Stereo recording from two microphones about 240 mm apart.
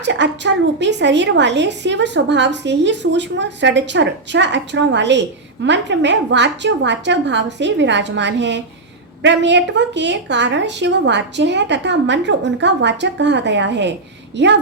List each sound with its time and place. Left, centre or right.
0.0 s a woman's voice: right